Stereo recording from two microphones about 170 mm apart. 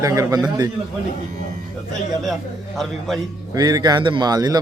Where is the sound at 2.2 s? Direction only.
Centre (ahead or behind).